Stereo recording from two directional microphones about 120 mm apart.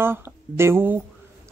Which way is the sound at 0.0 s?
20° right (ahead or behind).